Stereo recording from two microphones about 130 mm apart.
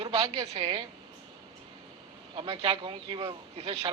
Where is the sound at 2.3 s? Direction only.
40° right (ahead or behind).